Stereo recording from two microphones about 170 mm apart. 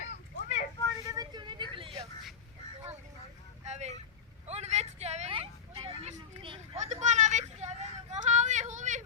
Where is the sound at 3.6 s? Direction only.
40° right (ahead or behind).